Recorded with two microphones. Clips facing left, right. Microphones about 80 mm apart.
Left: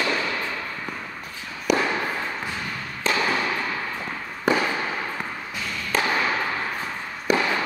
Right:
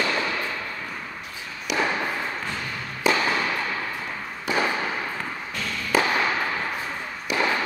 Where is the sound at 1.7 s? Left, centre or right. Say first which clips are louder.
Left 4 dB; left.